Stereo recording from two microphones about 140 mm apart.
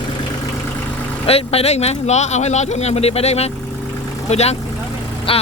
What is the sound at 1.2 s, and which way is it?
Speech, 45° left (ahead or behind).